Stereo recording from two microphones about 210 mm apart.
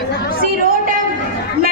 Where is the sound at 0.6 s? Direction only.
45° right (ahead or behind).